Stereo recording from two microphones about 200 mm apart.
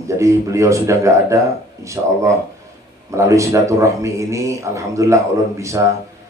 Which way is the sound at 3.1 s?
15° right (ahead or behind).